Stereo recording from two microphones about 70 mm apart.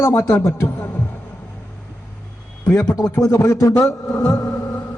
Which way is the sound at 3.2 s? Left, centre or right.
Left.